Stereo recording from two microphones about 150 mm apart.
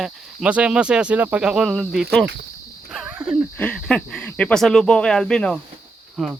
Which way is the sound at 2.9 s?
10° right (ahead or behind).